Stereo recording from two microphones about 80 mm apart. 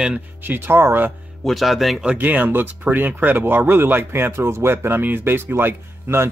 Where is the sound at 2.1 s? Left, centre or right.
Centre.